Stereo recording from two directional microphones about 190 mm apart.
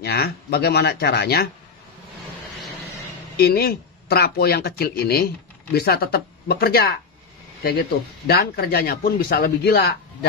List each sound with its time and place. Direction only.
0.0 s speech: 55° left (ahead or behind)
3.3 s speech: 55° left (ahead or behind)
8.3 s speech: 55° left (ahead or behind)